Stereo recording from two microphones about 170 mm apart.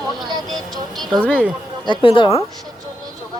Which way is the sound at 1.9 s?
30° left (ahead or behind).